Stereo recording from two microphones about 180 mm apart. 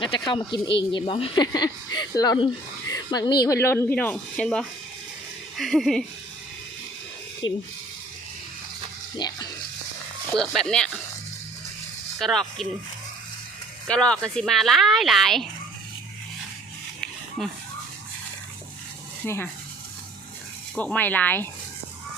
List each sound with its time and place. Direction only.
0.0 s speech: 30° left (ahead or behind); by 6.1 s centre (ahead or behind)
7.4 s speech: 30° left (ahead or behind)
9.1 s speech: 20° left (ahead or behind)
10.3 s speech: 5° left (ahead or behind)
12.2 s speech: centre (ahead or behind)
13.8 s speech: 5° left (ahead or behind)
17.0 s a sound: centre (ahead or behind)
19.2 s speech: 10° left (ahead or behind)
20.7 s speech: 10° left (ahead or behind)